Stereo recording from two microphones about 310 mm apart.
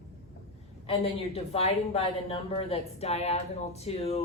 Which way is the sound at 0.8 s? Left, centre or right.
Centre.